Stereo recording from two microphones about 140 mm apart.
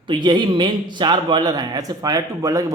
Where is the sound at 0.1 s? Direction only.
35° right (ahead or behind).